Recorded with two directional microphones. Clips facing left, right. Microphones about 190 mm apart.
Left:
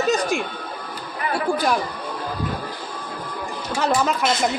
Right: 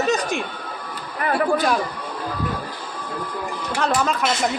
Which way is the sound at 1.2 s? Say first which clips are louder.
Right 4 dB; 55° right (ahead or behind).